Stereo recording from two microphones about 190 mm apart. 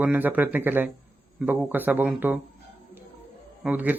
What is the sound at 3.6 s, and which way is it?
Speech, 10° right (ahead or behind).